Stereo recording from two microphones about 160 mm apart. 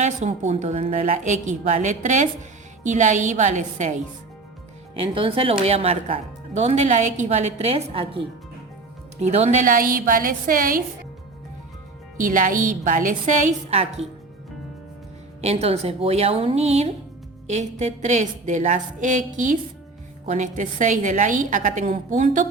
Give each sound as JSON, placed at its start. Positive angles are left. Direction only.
{"t": 0.0, "sound": "a woman's voice", "side_deg": -45}
{"t": 4.9, "sound": "speech", "side_deg": -35}
{"t": 9.2, "sound": "a woman's voice", "side_deg": -45}
{"t": 12.1, "sound": "a woman's voice", "side_deg": -60}
{"t": 15.4, "sound": "a woman's voice", "side_deg": -40}